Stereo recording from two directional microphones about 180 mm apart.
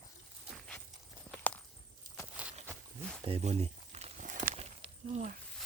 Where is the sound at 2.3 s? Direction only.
5° right (ahead or behind).